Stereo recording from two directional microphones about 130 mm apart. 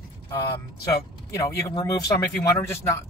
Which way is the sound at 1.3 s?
25° left (ahead or behind).